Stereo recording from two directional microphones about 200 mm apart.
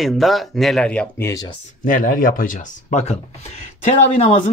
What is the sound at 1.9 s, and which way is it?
Speech, 40° left (ahead or behind).